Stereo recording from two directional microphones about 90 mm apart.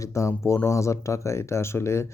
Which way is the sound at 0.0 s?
35° left (ahead or behind).